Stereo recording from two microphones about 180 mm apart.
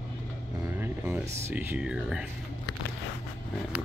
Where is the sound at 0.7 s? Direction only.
15° right (ahead or behind).